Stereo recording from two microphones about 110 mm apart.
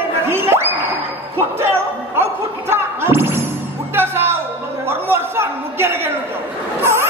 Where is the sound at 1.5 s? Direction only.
20° right (ahead or behind).